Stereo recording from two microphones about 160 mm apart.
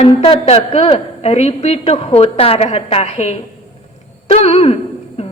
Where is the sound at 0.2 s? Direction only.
40° left (ahead or behind).